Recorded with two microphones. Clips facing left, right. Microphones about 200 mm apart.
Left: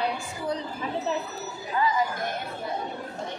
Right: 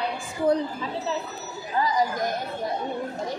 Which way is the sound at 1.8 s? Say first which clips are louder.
Right 2 dB; 40° right (ahead or behind).